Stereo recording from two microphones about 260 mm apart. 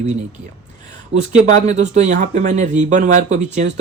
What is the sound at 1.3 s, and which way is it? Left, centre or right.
Speech, right.